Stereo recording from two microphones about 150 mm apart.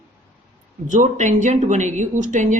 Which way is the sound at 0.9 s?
55° right (ahead or behind).